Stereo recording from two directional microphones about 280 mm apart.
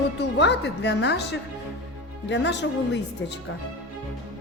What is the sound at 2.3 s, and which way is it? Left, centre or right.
Music, left.